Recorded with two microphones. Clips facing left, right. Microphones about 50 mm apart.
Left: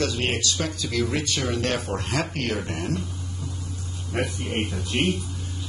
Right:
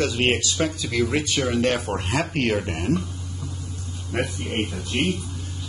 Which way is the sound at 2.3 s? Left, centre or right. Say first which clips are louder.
Right 5 dB; right.